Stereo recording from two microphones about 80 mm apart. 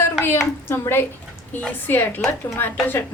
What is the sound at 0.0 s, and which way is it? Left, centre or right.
A woman's voice, left.